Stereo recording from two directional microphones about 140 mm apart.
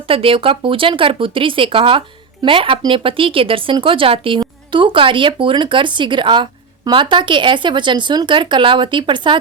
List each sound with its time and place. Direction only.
0.1 s speech: 40° right (ahead or behind)